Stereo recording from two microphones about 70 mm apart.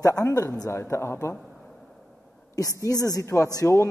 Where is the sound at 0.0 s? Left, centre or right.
Left.